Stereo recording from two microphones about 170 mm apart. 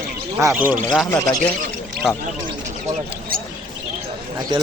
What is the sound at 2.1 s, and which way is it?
Speech, 5° right (ahead or behind).